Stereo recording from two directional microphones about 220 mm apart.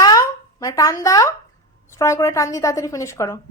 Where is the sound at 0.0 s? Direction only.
15° left (ahead or behind).